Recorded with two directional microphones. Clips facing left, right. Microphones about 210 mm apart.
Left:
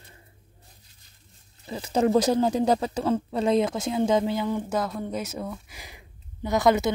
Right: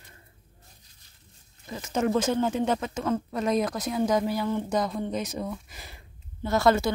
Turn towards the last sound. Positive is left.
turn(degrees=15)  # may be behind; listen again after turning